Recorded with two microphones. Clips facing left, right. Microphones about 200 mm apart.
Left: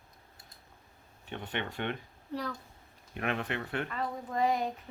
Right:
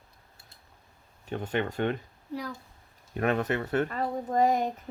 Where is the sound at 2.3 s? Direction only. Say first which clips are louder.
Right 1 dB; 10° right (ahead or behind).